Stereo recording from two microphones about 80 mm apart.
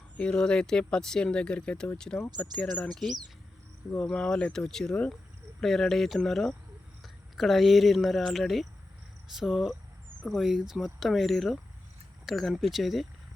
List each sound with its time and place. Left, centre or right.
0.2 s speech: centre